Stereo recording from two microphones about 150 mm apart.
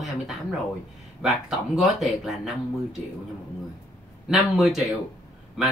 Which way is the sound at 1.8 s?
Centre (ahead or behind).